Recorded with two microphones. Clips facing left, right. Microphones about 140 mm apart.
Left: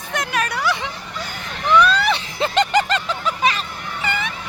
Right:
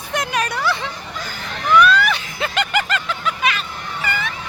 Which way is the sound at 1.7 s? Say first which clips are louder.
Right 1 dB; 30° left (ahead or behind).